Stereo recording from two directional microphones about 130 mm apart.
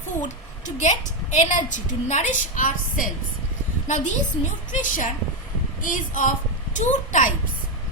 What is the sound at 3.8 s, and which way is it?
A woman's voice, 70° left (ahead or behind).